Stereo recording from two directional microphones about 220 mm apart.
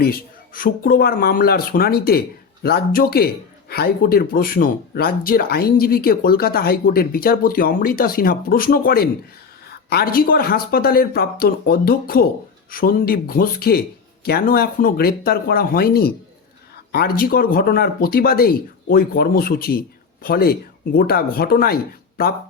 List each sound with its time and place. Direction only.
0.0 s speech: 40° left (ahead or behind)